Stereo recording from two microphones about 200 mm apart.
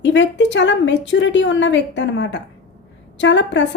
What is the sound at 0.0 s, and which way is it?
A woman's voice, 65° left (ahead or behind).